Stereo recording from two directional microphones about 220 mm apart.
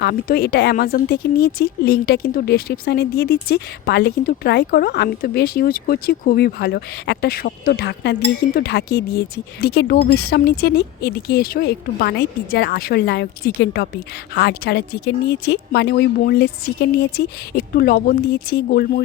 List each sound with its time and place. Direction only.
0.0 s speech: 45° left (ahead or behind)